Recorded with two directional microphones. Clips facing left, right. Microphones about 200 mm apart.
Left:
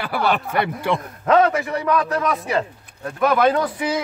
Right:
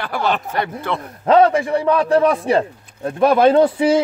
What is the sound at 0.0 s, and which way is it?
Speech, 10° left (ahead or behind).